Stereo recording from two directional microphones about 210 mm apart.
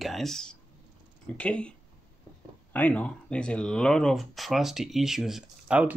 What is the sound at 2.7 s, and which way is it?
Speech, 5° left (ahead or behind).